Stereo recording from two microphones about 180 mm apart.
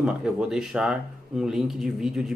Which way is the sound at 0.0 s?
5° right (ahead or behind).